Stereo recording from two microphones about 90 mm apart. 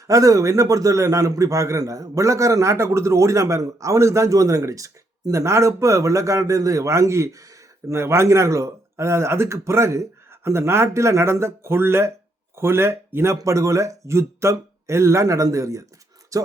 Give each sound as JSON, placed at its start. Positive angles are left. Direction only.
{"t": 0.1, "sound": "a man's voice", "side_deg": -40}
{"t": 16.3, "sound": "music", "side_deg": -35}